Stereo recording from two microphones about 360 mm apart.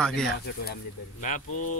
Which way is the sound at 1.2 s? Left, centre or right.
Left.